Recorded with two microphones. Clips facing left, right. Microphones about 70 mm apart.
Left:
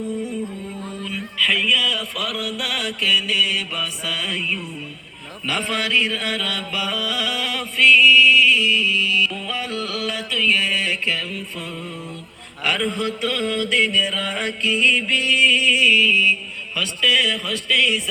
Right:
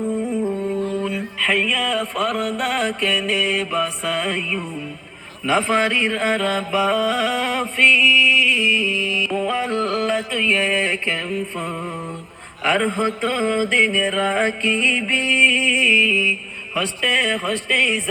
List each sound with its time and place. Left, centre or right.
0.0 s music: right
1.0 s mantra: right
5.5 s music: right